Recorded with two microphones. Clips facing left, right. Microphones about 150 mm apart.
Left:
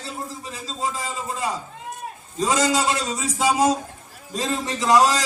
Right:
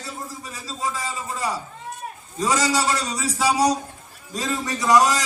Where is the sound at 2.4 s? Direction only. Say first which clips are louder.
Left 1 dB; 20° left (ahead or behind).